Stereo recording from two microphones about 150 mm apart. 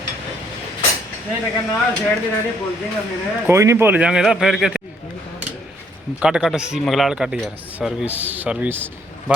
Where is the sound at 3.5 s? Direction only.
20° right (ahead or behind).